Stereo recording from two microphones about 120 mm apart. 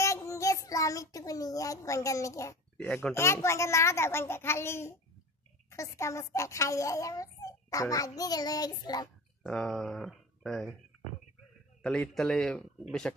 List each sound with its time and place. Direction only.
0.0 s child singing: 25° left (ahead or behind)
2.9 s a child's voice: 15° left (ahead or behind); by 9.1 s 35° left (ahead or behind)
9.4 s speech: 5° left (ahead or behind)
11.8 s speech: 5° left (ahead or behind)